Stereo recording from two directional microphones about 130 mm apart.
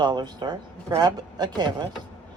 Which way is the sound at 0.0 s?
35° right (ahead or behind).